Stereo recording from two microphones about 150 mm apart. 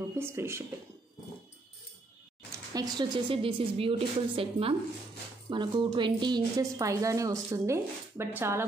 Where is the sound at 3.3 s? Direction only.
35° right (ahead or behind).